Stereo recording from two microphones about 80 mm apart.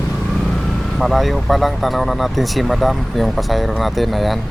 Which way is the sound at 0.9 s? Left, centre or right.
Centre.